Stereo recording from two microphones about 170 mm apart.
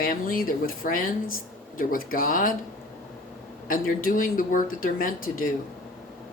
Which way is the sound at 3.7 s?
55° left (ahead or behind).